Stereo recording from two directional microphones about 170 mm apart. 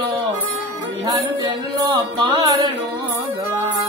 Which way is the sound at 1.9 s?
25° right (ahead or behind).